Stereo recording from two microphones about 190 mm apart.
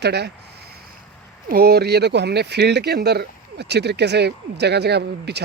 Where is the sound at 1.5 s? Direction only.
55° right (ahead or behind).